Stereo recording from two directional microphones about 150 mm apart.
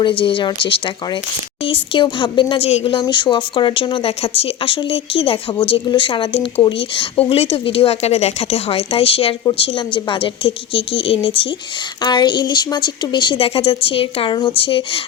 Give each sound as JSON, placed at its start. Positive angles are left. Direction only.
{"t": 0.0, "sound": "speech", "side_deg": 35}